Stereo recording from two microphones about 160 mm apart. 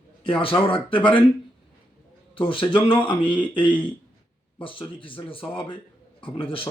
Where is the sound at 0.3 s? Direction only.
35° left (ahead or behind).